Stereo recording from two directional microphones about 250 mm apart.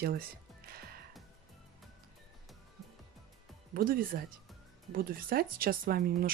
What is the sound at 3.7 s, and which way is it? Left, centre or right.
Speech, right.